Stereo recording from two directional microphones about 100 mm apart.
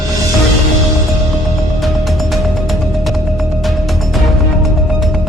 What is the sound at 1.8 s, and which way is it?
Music, centre (ahead or behind).